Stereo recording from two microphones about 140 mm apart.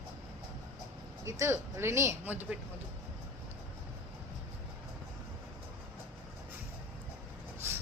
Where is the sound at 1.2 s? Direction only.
20° right (ahead or behind).